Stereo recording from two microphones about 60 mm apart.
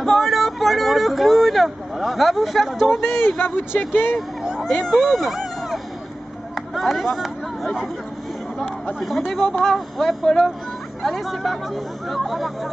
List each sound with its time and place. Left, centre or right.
0.0 s speech: centre
3.1 s speech: left
4.6 s speech: centre
6.5 s a sound: centre
7.1 s speech: centre
9.3 s speech: centre